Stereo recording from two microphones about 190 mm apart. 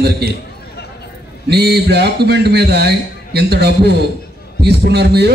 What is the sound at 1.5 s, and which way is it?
A man's voice, 60° right (ahead or behind).